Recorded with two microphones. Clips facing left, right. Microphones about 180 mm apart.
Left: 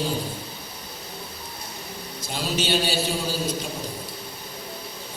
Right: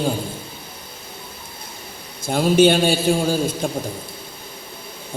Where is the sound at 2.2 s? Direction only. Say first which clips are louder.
Right 14 dB; 50° right (ahead or behind).